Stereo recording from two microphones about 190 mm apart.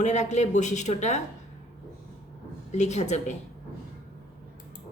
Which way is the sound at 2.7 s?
35° left (ahead or behind).